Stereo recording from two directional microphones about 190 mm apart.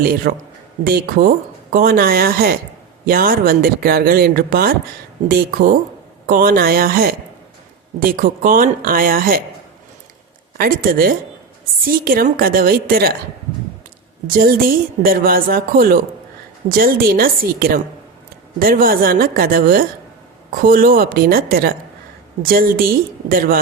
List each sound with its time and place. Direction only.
0.0 s a woman's voice: 50° right (ahead or behind)
6.2 s a woman's voice: 50° right (ahead or behind)
10.6 s a woman's voice: 50° right (ahead or behind)
14.3 s a woman's voice: 50° right (ahead or behind)